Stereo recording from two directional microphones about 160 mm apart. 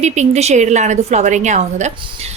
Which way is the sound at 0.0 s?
45° right (ahead or behind).